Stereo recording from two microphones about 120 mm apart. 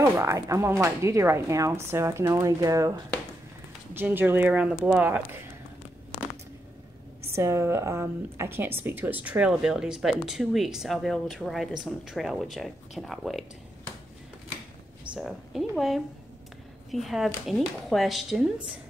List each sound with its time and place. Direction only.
0.0 s speech: 25° right (ahead or behind)
3.9 s a woman's voice: 15° right (ahead or behind)
7.3 s speech: 20° right (ahead or behind); by 13.5 s centre (ahead or behind)
15.1 s speech: centre (ahead or behind)